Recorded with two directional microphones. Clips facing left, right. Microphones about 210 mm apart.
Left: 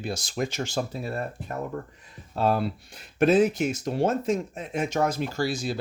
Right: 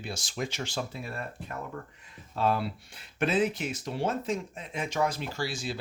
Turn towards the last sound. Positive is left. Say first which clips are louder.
# left 6 dB
turn(degrees=40)  # may be behind; listen again after turning